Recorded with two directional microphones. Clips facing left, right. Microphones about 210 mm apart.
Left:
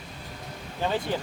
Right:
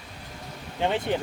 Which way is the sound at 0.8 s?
20° right (ahead or behind).